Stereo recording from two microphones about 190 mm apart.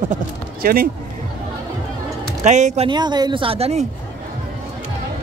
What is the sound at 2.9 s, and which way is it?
Speech, 20° right (ahead or behind).